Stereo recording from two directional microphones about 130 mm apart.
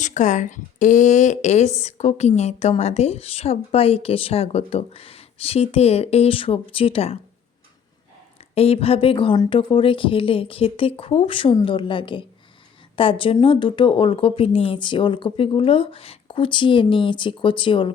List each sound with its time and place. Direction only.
0.0 s speech: 70° left (ahead or behind); by 7.2 s 50° left (ahead or behind)
8.5 s a woman's voice: 50° left (ahead or behind)